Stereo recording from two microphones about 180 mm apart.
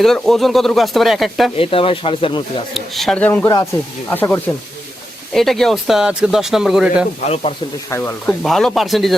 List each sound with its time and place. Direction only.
0.0 s speech: centre (ahead or behind)
1.5 s speech: 30° left (ahead or behind)
2.7 s speech: centre (ahead or behind)
7.9 s speech: 15° left (ahead or behind)